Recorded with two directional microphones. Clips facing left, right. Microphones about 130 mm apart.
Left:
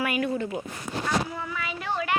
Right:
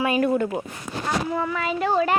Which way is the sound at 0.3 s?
60° right (ahead or behind).